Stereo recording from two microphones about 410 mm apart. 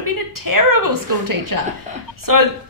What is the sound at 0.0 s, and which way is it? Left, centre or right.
Speech, right.